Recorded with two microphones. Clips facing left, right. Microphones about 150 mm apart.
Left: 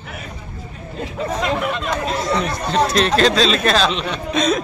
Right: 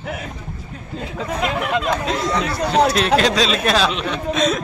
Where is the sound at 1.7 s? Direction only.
90° right.